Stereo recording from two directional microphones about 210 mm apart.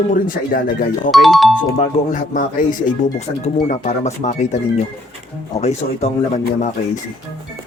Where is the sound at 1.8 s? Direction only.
40° left (ahead or behind).